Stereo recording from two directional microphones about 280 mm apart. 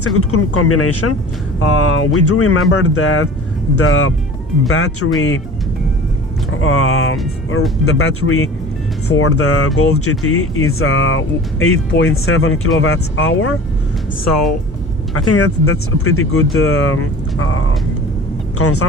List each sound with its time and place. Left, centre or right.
0.0 s speech: left
6.6 s speech: left
15.1 s speech: left